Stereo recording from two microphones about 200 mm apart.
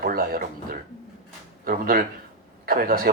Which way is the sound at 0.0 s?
45° right (ahead or behind).